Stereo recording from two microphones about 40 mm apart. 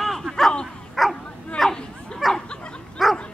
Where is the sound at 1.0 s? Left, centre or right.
Centre.